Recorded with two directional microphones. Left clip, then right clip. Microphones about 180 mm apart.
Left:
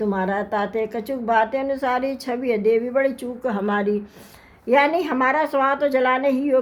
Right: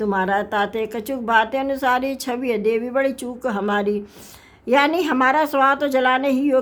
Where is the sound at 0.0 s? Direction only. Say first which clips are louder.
Right 3 dB; 40° right (ahead or behind).